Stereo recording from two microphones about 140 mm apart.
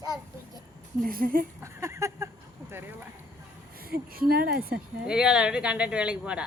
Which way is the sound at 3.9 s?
90° right.